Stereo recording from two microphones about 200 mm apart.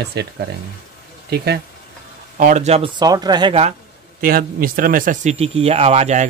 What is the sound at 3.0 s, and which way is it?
Speech, 20° right (ahead or behind).